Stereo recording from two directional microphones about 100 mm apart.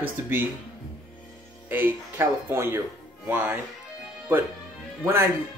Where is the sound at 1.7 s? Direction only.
20° right (ahead or behind).